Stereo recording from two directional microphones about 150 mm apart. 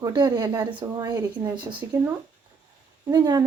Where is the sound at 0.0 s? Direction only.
30° right (ahead or behind).